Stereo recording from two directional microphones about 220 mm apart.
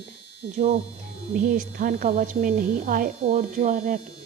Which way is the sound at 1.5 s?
40° right (ahead or behind).